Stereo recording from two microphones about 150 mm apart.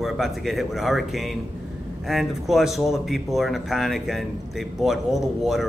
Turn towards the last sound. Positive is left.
turn(degrees=0)  # may be behind; listen again after turning